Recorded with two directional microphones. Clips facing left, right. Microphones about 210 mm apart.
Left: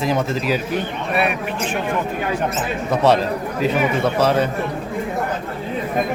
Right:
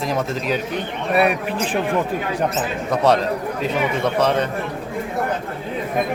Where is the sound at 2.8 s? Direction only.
Centre (ahead or behind).